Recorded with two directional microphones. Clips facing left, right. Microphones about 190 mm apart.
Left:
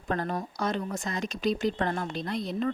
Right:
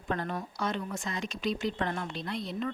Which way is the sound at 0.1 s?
40° left (ahead or behind).